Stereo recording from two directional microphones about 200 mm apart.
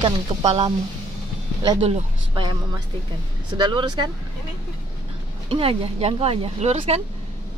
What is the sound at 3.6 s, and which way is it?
Speech, 25° right (ahead or behind).